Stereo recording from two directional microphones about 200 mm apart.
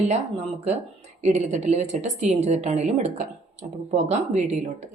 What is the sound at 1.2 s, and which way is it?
A woman's voice, 35° right (ahead or behind).